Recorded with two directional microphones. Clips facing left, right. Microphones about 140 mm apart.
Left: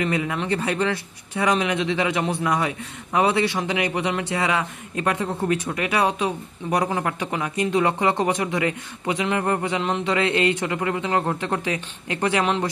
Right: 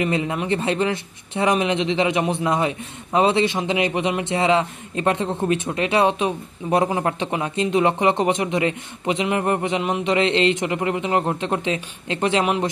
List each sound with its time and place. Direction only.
0.0 s speech: 25° right (ahead or behind)